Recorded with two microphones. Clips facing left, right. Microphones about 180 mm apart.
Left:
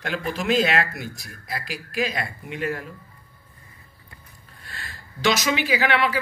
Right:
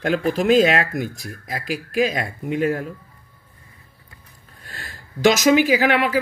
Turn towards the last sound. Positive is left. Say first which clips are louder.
# right 4 dB
turn(degrees=-45)  # may be behind; listen again after turning